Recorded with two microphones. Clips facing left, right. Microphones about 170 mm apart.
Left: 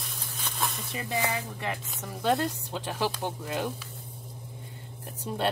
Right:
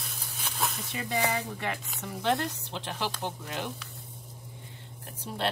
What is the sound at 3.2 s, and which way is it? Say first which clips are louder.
Speech: left 3 dB; 15° left (ahead or behind).